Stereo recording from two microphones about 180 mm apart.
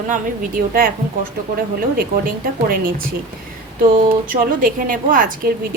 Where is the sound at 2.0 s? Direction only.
55° right (ahead or behind).